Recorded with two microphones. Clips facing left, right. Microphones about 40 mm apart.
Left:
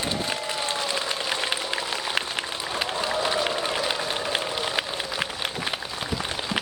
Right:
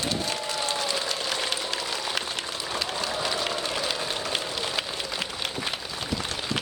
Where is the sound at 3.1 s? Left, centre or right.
Centre.